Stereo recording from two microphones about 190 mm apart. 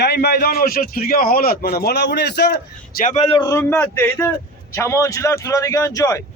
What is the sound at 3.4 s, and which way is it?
A man's voice, 15° left (ahead or behind).